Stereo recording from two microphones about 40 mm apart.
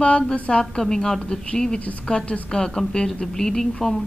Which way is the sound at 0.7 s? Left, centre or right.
Centre.